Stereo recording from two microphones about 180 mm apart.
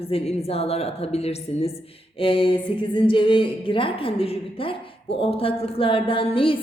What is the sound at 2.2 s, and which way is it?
Speech, 30° left (ahead or behind).